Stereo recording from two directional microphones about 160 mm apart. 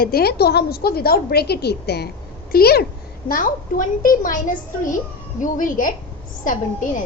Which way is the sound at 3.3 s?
60° left (ahead or behind).